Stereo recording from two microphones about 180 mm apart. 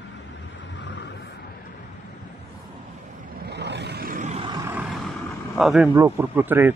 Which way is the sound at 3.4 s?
70° right (ahead or behind).